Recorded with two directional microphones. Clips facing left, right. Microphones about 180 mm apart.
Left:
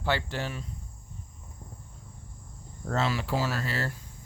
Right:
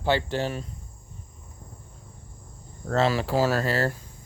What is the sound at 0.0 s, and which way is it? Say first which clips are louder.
Speech: right 6 dB; 25° right (ahead or behind).